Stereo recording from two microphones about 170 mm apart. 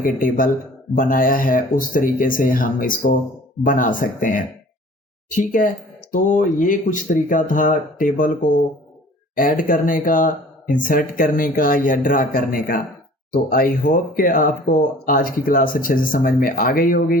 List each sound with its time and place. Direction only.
0.0 s speech: 55° left (ahead or behind)